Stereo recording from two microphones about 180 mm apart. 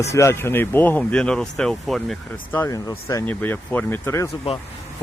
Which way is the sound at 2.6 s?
15° left (ahead or behind).